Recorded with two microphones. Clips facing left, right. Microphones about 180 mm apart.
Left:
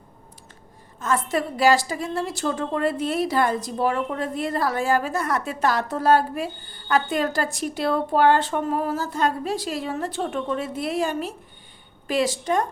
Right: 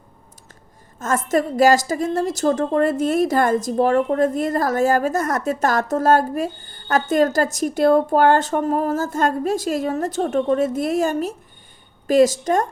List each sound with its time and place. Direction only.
0.9 s a woman's voice: 45° right (ahead or behind)